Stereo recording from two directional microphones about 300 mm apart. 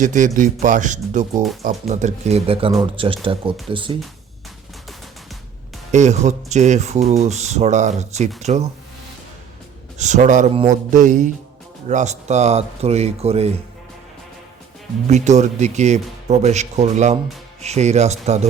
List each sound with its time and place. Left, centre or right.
0.0 s speech: right
5.9 s speech: right
10.0 s speech: right
15.0 s speech: right